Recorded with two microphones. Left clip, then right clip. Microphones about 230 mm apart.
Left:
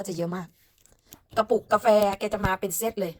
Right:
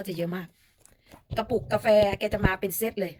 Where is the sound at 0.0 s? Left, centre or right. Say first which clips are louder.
Left 1 dB; centre.